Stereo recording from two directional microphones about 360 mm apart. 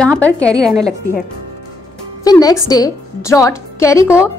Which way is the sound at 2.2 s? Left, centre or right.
Centre.